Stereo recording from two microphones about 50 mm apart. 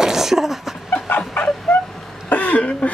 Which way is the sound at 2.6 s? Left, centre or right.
Left.